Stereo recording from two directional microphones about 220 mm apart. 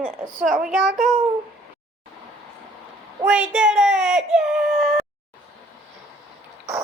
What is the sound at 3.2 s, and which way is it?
Speech, 5° right (ahead or behind).